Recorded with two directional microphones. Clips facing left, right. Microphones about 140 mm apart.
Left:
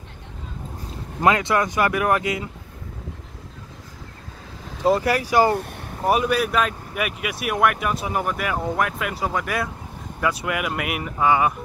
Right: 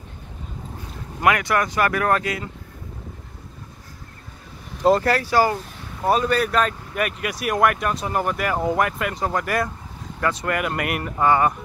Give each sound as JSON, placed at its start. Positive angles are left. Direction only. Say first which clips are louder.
{"t": 1.2, "sound": "speech", "louder": "left 1 dB", "side_deg": 25}
{"t": 4.8, "sound": "speech", "louder": "right 2 dB", "side_deg": 10}
{"t": 5.6, "sound": "boat", "louder": "left 5 dB", "side_deg": 60}
{"t": 6.0, "sound": "speech", "louder": "even", "side_deg": 10}